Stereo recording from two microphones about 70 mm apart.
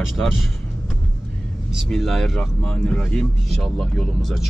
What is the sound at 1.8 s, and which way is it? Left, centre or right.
Speech, centre.